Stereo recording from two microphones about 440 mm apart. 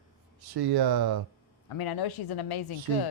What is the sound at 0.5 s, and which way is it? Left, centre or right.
Speech, right.